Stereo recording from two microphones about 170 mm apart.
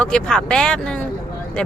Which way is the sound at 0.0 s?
5° left (ahead or behind).